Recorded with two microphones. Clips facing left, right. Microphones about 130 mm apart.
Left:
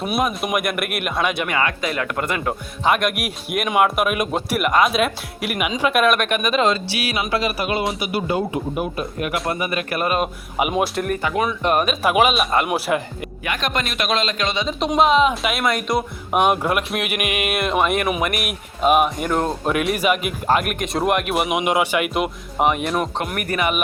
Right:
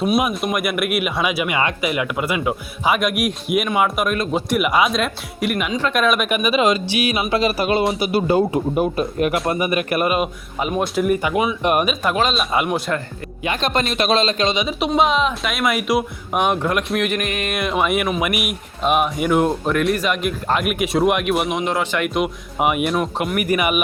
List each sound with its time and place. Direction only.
0.4 s music: centre (ahead or behind)
4.7 s speech: centre (ahead or behind); by 9.3 s 30° right (ahead or behind)
9.5 s speech: 20° right (ahead or behind)
10.6 s speech: 15° left (ahead or behind)
10.9 s music: 5° right (ahead or behind)
11.2 s speech: 15° right (ahead or behind)
12.1 s speech: 10° left (ahead or behind)
12.4 s music: centre (ahead or behind)
12.6 s speech: 10° left (ahead or behind)
13.4 s speech: 30° right (ahead or behind)
14.5 s speech: 10° right (ahead or behind)
14.9 s music: centre (ahead or behind)
19.6 s music: 5° left (ahead or behind)
21.6 s music: 10° left (ahead or behind); by 23.8 s 10° right (ahead or behind)